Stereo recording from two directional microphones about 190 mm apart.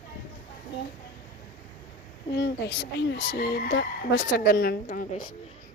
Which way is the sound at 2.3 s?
65° left (ahead or behind).